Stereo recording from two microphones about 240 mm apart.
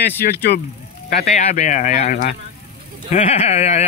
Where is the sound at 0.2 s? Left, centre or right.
Left.